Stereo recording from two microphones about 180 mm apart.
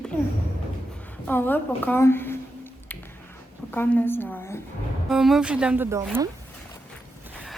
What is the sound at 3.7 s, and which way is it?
Speech, 10° left (ahead or behind).